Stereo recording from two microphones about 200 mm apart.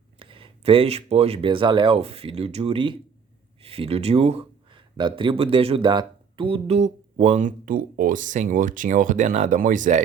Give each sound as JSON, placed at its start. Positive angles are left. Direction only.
{"t": 0.2, "sound": "speech", "side_deg": -25}